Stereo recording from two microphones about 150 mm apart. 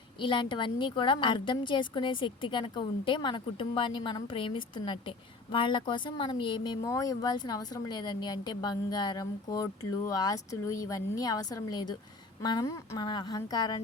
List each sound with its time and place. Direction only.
0.2 s a woman's voice: 30° left (ahead or behind)